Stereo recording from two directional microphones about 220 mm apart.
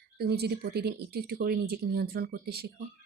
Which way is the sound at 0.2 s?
45° right (ahead or behind).